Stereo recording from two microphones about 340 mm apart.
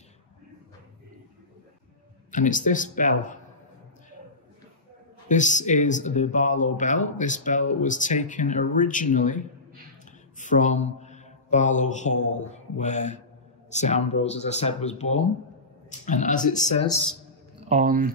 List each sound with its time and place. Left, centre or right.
2.3 s speech: left
5.3 s speech: left
10.4 s a man's voice: left
17.6 s speech: right